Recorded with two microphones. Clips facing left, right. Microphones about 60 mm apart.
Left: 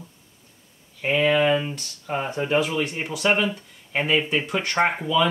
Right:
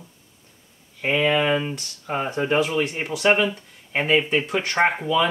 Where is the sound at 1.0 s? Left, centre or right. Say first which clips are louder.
Left 1 dB; centre.